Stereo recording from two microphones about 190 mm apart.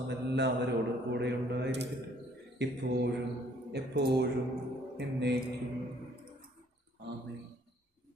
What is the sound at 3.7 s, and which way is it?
A man's voice, 60° right (ahead or behind).